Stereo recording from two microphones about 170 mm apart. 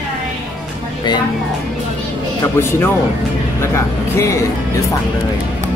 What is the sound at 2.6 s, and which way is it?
Speech, 15° left (ahead or behind).